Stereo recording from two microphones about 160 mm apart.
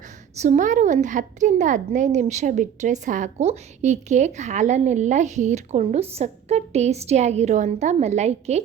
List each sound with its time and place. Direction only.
0.3 s a woman's voice: 50° right (ahead or behind)